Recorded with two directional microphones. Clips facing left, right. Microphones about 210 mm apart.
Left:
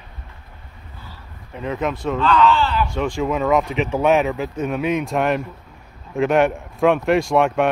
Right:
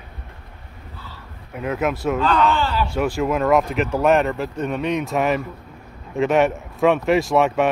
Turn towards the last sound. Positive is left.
turn(degrees=0)  # may be behind; listen again after turning